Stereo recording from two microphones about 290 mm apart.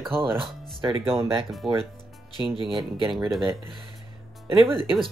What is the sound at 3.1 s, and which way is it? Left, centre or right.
Speech, centre.